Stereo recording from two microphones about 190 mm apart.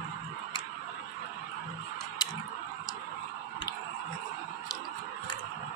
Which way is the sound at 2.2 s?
20° left (ahead or behind).